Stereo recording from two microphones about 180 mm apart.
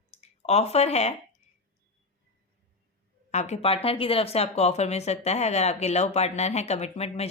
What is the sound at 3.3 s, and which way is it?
A woman's voice, 40° left (ahead or behind).